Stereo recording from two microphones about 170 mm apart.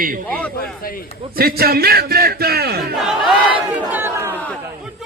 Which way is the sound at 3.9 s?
15° right (ahead or behind).